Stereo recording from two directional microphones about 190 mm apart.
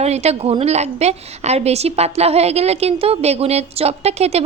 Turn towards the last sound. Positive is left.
turn(degrees=-35)  # may be behind; listen again after turning